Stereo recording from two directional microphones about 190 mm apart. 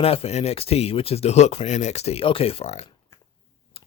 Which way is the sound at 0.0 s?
30° left (ahead or behind).